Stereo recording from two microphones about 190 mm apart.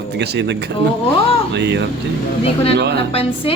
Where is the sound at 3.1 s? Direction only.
30° left (ahead or behind).